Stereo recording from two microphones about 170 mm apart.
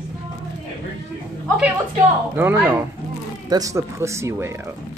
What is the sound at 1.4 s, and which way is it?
A woman's voice, 5° right (ahead or behind).